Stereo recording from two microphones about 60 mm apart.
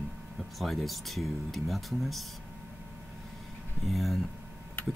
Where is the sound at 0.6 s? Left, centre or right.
Centre.